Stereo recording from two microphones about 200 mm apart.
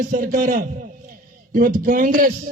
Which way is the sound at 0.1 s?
45° right (ahead or behind).